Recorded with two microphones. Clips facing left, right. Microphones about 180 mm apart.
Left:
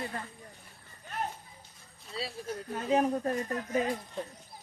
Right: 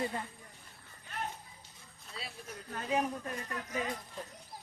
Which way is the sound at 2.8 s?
35° left (ahead or behind).